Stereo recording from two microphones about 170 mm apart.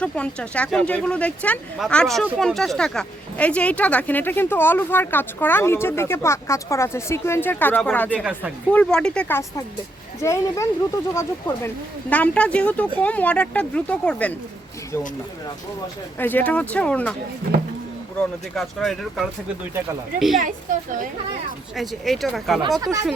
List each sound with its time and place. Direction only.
0.0 s speech: 5° left (ahead or behind)
8.2 s speech: 5° right (ahead or behind)
8.7 s speech: 5° left (ahead or behind)
10.2 s speech: 20° left (ahead or behind)
16.1 s speech: 10° left (ahead or behind)
18.2 s speech: centre (ahead or behind)
21.8 s speech: centre (ahead or behind)
22.8 s speech: 20° right (ahead or behind)